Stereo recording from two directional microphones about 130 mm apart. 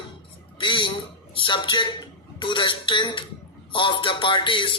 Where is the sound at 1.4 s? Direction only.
40° left (ahead or behind).